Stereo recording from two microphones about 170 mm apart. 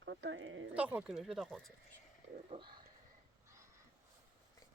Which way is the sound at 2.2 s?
40° right (ahead or behind).